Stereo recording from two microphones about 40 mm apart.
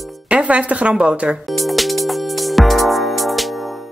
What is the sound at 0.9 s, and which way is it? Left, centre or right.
Speech, right.